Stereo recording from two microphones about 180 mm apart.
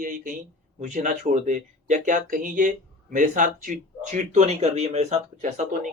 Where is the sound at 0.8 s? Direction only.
45° right (ahead or behind).